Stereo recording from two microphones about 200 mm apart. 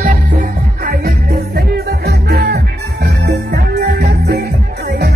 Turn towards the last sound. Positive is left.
turn(degrees=-50)  # may be behind; listen again after turning